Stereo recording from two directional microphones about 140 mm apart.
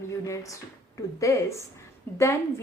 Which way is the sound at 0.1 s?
20° left (ahead or behind).